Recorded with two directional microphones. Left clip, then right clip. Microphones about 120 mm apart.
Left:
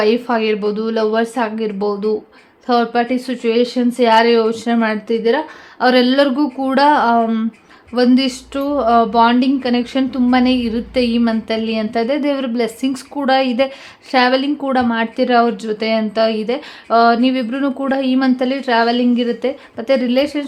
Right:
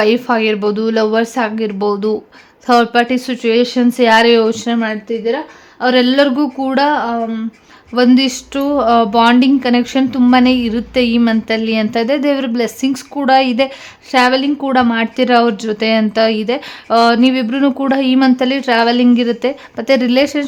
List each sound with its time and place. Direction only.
0.0 s a woman's voice: 25° right (ahead or behind)
5.0 s speech: 15° left (ahead or behind)
5.8 s speech: 5° right (ahead or behind)
6.1 s speech: 20° right (ahead or behind)
6.8 s speech: 5° left (ahead or behind)
7.9 s a woman's voice: 20° right (ahead or behind)